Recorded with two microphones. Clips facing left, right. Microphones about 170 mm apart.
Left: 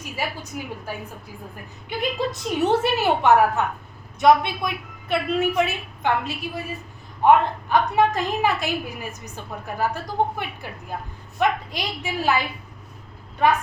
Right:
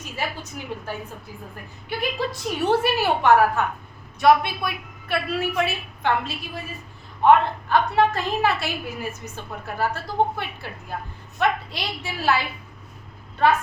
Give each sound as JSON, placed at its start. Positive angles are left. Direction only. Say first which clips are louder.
{"t": 0.0, "sound": "a woman's voice", "louder": "left 1 dB", "side_deg": 10}